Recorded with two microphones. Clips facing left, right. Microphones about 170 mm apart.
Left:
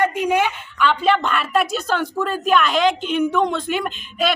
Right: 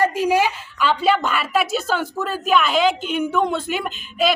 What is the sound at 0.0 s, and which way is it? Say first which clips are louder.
Speech: right 1 dB; 35° right (ahead or behind).